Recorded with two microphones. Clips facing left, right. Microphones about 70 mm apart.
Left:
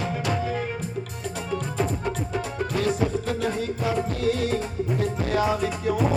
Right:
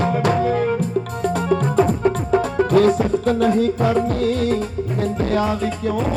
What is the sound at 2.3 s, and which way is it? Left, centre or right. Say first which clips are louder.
Music: right 14 dB; right.